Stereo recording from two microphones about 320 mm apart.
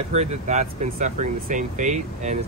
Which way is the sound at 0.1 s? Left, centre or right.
Right.